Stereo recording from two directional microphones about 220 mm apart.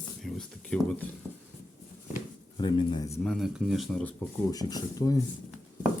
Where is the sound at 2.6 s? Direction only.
20° left (ahead or behind).